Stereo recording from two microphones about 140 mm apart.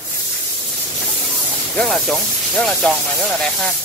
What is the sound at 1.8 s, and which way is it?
Speech, centre (ahead or behind).